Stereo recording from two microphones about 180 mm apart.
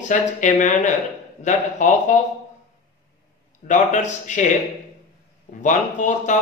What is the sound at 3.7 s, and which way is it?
Speech, 40° left (ahead or behind).